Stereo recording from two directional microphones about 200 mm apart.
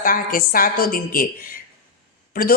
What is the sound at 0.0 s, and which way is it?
A woman's voice, 45° left (ahead or behind).